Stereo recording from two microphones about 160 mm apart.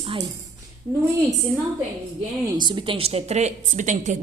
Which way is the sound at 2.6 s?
30° right (ahead or behind).